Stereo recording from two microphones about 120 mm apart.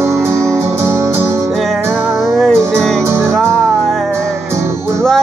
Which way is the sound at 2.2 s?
Centre (ahead or behind).